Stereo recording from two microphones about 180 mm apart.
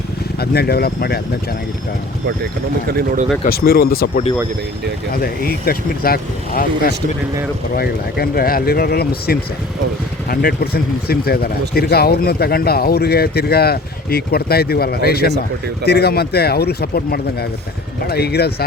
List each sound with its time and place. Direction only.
0.3 s speech: 60° left (ahead or behind)
3.4 s speech: 60° left (ahead or behind)